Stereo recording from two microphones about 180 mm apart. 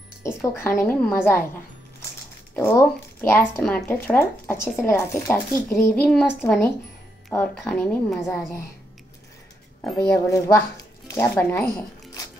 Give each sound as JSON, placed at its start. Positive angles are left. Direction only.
{"t": 0.2, "sound": "speech", "side_deg": 15}
{"t": 2.5, "sound": "speech", "side_deg": 10}
{"t": 8.1, "sound": "a woman's voice", "side_deg": 0}
{"t": 10.1, "sound": "speech", "side_deg": 15}